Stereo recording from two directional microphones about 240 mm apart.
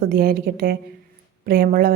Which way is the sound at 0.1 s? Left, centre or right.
Right.